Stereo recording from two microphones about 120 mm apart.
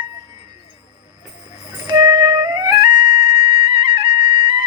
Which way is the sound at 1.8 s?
35° right (ahead or behind).